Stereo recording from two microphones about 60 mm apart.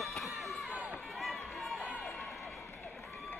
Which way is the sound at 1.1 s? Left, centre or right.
Centre.